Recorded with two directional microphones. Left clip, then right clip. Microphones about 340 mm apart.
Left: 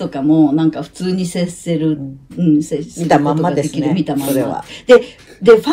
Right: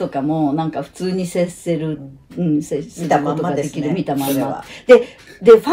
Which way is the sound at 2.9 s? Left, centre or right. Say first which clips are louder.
Left 4 dB; left.